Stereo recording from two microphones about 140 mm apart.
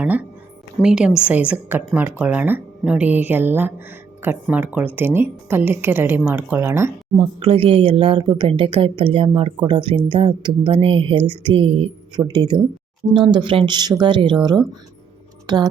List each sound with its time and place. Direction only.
0.0 s speech: 10° right (ahead or behind)
7.2 s speech: 40° right (ahead or behind)
12.2 s speech: 30° right (ahead or behind)